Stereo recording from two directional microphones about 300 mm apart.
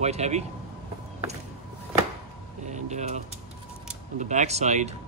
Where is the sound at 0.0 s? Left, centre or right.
Right.